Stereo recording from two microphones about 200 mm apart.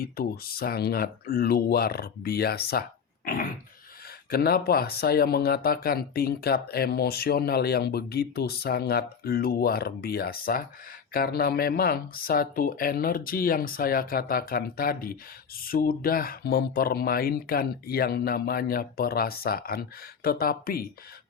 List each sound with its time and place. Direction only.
0.0 s speech: 50° left (ahead or behind)